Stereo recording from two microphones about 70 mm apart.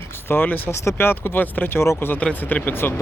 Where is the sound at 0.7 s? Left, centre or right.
Left.